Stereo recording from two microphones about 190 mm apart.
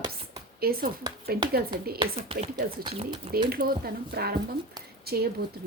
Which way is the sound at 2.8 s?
30° right (ahead or behind).